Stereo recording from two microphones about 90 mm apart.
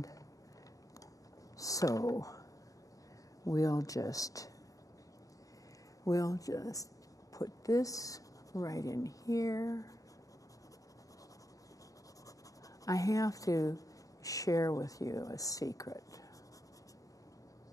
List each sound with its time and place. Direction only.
1.6 s speech: 40° left (ahead or behind)
3.4 s a woman's voice: 40° left (ahead or behind)
6.0 s a woman's voice: 40° left (ahead or behind)
12.8 s a woman's voice: 40° left (ahead or behind)